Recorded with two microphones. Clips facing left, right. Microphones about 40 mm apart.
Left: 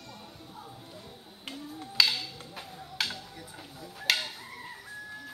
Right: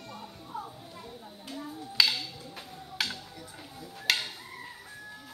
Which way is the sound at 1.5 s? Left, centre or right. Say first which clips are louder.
Right 1 dB; left.